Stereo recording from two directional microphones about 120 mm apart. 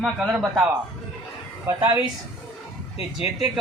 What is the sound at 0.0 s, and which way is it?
Speech, 15° right (ahead or behind).